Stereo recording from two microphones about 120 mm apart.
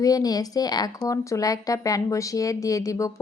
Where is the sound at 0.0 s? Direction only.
30° left (ahead or behind).